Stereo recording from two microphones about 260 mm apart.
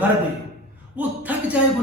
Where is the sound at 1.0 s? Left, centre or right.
Centre.